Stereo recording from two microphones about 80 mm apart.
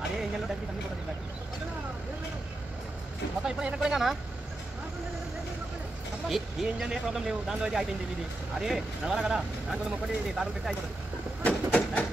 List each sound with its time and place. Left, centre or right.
3.4 s speech: centre
6.2 s speech: centre
11.4 s a sound: centre